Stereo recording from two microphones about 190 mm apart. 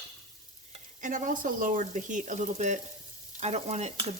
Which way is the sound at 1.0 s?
45° right (ahead or behind).